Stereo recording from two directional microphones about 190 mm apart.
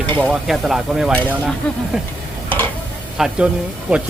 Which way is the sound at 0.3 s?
Centre (ahead or behind).